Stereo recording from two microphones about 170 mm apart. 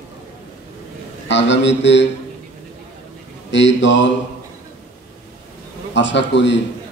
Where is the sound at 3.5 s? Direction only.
90° left.